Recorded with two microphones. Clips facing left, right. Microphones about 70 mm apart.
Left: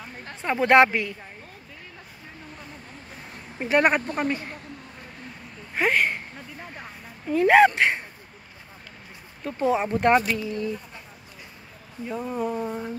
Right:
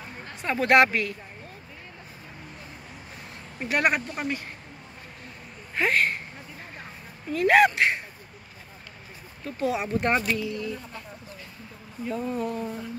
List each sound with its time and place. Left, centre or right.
0.4 s speech: left
3.5 s speech: left
5.8 s speech: left
7.3 s speech: left
9.4 s speech: left
12.1 s speech: centre
12.6 s speech: left